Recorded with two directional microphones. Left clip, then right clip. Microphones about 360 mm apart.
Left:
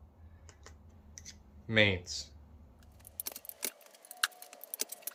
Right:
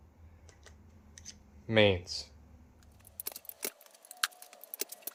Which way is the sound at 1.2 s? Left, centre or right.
Centre.